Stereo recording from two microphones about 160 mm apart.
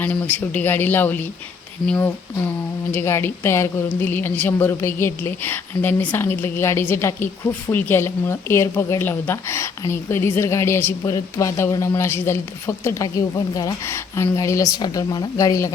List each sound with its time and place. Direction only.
0.0 s a woman's voice: 10° left (ahead or behind)